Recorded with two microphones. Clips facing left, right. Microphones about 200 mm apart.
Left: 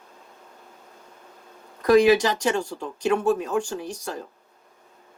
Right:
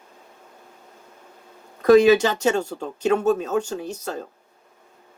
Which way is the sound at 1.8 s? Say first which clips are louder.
Right 3 dB; 25° right (ahead or behind).